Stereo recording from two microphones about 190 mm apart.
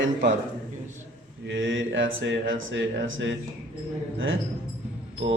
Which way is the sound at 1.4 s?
85° right.